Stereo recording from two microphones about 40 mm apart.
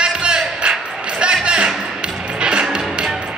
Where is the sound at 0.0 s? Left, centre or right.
Right.